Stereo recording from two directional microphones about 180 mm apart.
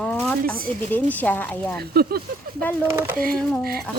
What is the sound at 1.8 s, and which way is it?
Speech, 60° right (ahead or behind).